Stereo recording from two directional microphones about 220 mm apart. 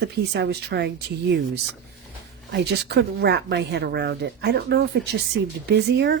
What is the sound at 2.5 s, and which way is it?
A woman's voice, 50° right (ahead or behind).